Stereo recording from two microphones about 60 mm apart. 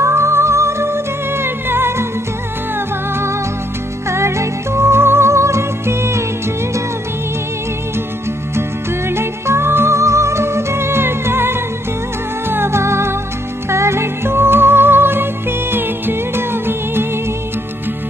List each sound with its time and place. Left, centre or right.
0.0 s music: right
9.0 s music: right